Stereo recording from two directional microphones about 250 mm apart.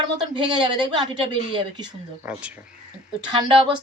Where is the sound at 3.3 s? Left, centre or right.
Centre.